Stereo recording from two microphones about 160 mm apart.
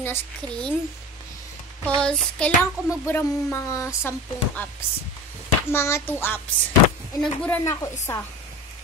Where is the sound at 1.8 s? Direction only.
5° left (ahead or behind).